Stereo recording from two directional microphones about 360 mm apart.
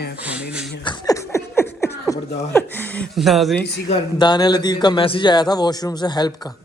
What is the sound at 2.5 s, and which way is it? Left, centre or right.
Speech, centre.